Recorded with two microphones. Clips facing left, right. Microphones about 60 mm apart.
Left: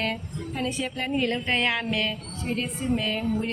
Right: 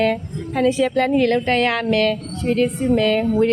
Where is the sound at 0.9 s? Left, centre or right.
Right.